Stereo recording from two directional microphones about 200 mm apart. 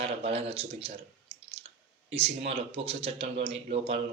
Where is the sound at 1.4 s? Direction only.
30° right (ahead or behind).